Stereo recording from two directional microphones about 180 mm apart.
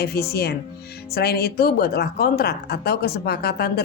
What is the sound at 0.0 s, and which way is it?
A woman's voice, 60° left (ahead or behind).